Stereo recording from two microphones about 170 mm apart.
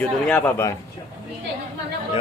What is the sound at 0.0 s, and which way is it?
Speech, 10° left (ahead or behind).